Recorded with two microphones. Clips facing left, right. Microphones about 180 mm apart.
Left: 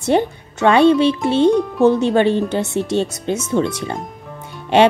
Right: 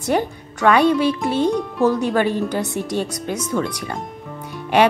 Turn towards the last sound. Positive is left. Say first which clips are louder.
# left 3 dB
turn(degrees=25)  # may be behind; listen again after turning